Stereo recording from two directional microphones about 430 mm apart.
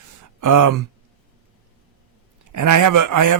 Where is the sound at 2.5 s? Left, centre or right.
Right.